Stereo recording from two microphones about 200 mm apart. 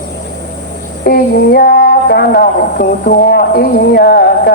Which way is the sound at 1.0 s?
50° left (ahead or behind).